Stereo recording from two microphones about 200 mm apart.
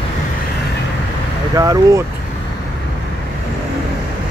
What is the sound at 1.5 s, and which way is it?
Speech, 20° right (ahead or behind).